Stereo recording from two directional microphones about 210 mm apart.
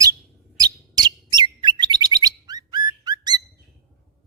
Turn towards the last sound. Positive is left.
turn(degrees=-20)  # may be behind; listen again after turning